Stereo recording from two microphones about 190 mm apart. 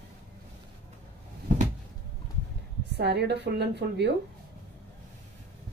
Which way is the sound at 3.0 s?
60° right (ahead or behind).